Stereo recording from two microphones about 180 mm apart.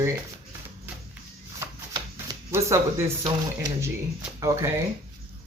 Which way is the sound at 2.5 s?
15° right (ahead or behind).